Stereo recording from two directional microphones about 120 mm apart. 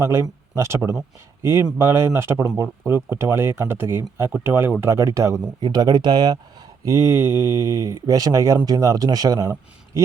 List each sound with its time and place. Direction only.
0.0 s speech: 25° right (ahead or behind)
6.8 s speech: 25° right (ahead or behind)